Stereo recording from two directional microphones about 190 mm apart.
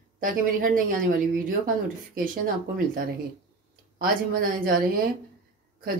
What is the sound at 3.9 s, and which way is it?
A woman's voice, 50° right (ahead or behind).